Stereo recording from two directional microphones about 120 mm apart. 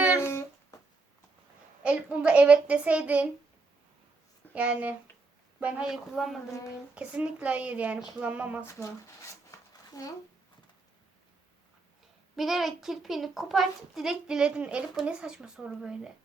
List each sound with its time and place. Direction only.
0.2 s a sound: 20° left (ahead or behind)
1.8 s a woman's voice: 10° right (ahead or behind)
4.5 s a woman's voice: 10° right (ahead or behind)
8.6 s speech: 25° left (ahead or behind)
12.4 s a child's voice: centre (ahead or behind)